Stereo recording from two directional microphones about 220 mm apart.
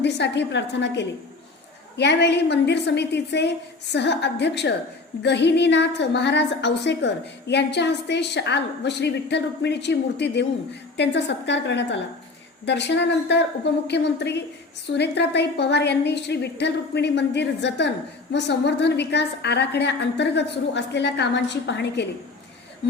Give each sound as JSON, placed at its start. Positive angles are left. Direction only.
{"t": 0.0, "sound": "a woman's voice", "side_deg": 50}